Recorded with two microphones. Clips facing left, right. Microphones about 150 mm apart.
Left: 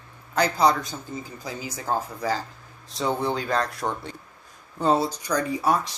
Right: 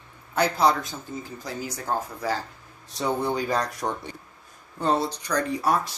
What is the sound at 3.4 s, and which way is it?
Speech, 15° right (ahead or behind).